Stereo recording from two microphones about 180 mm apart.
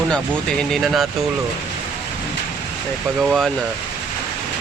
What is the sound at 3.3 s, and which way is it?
Speech, centre (ahead or behind).